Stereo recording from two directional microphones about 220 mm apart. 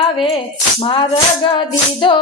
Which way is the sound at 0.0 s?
25° left (ahead or behind).